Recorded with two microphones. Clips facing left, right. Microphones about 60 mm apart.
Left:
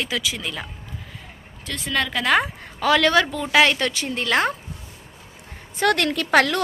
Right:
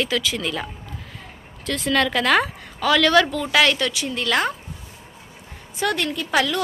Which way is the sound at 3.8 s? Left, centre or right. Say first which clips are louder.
Even; left.